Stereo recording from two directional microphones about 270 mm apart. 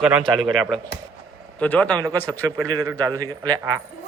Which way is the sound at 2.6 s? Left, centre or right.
Centre.